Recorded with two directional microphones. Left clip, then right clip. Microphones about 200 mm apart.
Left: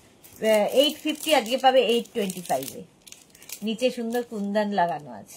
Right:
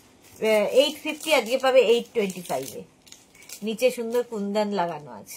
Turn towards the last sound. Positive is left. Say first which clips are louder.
# left 2 dB
turn(degrees=-20)  # may be behind; listen again after turning